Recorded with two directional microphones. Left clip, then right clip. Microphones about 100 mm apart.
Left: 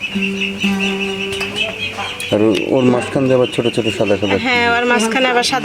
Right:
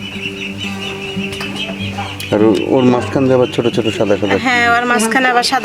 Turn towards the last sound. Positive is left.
turn(degrees=-40)  # may be behind; listen again after turning